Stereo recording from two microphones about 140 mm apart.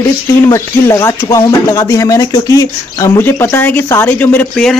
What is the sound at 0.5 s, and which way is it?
Speech, 20° left (ahead or behind).